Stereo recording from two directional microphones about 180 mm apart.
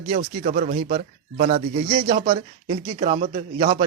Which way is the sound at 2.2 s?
30° right (ahead or behind).